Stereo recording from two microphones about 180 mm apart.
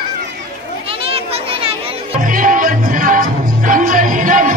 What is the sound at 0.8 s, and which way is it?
Children playing, 30° right (ahead or behind).